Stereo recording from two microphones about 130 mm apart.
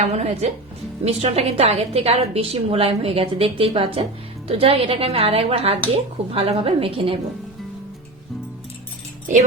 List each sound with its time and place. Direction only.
0.0 s a woman's voice: 60° right (ahead or behind)